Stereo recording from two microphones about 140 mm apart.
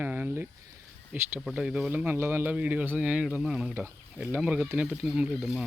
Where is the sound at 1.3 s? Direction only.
5° right (ahead or behind).